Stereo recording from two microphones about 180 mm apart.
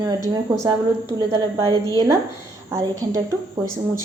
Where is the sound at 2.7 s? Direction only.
20° right (ahead or behind).